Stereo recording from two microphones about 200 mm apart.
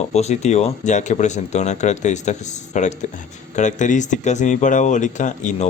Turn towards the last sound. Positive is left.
turn(degrees=35)  # may be behind; listen again after turning